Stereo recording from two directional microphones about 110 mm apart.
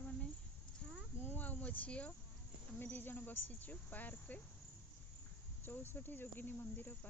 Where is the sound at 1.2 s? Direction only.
15° left (ahead or behind).